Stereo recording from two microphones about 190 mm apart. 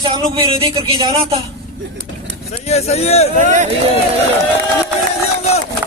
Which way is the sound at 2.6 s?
35° left (ahead or behind).